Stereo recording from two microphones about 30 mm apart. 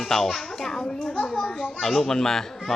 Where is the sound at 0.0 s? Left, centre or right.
Centre.